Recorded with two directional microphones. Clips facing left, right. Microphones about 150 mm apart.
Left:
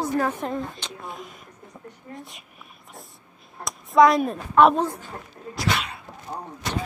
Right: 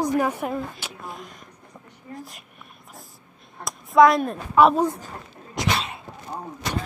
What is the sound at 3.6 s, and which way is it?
Speech, centre (ahead or behind).